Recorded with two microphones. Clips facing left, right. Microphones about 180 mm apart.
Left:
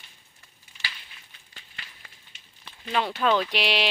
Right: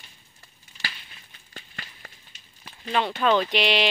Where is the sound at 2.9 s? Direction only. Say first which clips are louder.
Right 2 dB; 5° left (ahead or behind).